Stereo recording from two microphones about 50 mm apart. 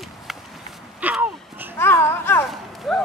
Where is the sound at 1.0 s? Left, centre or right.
Right.